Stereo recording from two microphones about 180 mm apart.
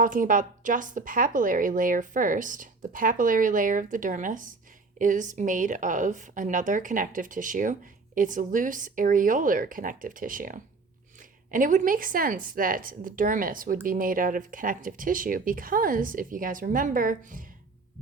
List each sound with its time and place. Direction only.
0.0 s speech: 50° right (ahead or behind)